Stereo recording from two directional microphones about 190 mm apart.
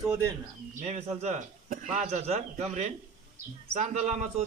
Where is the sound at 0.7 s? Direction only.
35° right (ahead or behind).